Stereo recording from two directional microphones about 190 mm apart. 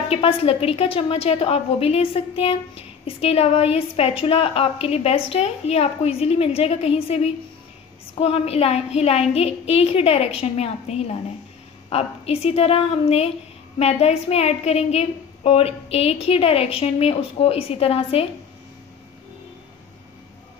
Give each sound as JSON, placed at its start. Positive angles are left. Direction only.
{"t": 0.1, "sound": "a woman's voice", "side_deg": 30}